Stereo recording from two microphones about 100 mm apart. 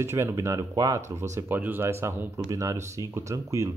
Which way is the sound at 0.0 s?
25° right (ahead or behind).